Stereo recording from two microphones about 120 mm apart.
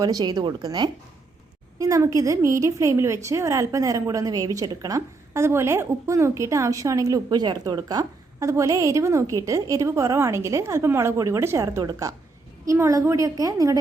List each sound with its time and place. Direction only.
0.0 s a woman's voice: 30° right (ahead or behind)